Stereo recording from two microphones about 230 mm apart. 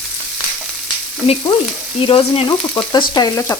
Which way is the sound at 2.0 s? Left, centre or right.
Left.